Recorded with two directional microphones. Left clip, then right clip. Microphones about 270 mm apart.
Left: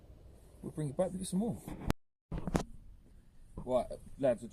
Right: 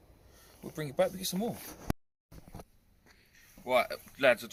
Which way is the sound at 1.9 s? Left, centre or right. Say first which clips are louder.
Even; centre.